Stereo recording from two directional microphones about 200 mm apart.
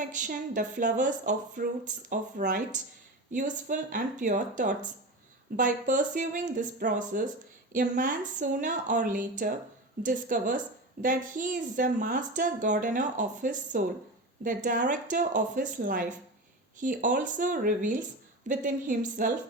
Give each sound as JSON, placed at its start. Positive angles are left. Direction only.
{"t": 0.1, "sound": "speech", "side_deg": -40}